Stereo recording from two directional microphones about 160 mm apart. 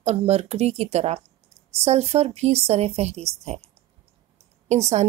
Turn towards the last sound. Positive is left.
turn(degrees=-45)  # may be behind; listen again after turning